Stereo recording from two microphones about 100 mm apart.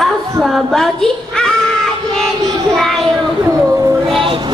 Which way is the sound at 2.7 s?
5° left (ahead or behind).